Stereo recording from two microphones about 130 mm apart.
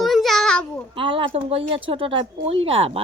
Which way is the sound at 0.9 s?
40° right (ahead or behind).